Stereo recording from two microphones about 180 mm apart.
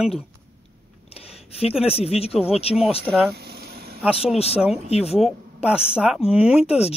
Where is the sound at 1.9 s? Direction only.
35° left (ahead or behind).